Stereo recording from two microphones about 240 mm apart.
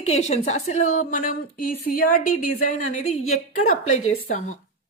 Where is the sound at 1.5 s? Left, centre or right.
Left.